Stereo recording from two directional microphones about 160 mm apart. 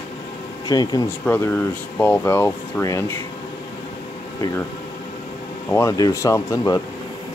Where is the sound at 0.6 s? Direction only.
25° left (ahead or behind).